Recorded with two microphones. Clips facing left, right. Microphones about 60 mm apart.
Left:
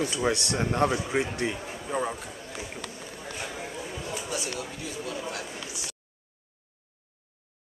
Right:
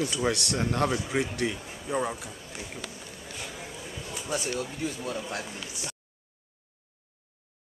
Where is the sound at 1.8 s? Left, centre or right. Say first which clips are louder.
Right 1 dB; centre.